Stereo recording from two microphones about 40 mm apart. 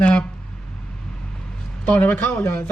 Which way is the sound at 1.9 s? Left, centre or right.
Left.